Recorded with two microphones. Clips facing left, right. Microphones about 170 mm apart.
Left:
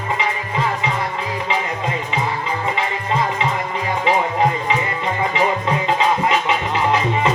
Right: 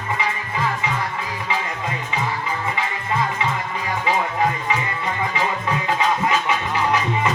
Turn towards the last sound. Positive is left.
turn(degrees=20)  # may be behind; listen again after turning